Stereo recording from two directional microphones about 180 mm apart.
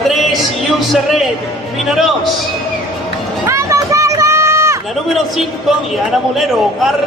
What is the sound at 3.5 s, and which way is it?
Run, 15° right (ahead or behind).